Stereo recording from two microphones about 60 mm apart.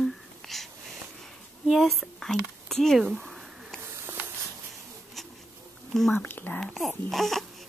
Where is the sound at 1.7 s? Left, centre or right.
Centre.